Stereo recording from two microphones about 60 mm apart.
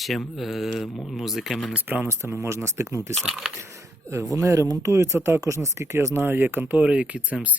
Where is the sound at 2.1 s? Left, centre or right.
Right.